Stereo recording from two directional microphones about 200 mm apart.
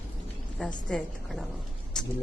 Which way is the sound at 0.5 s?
Centre (ahead or behind).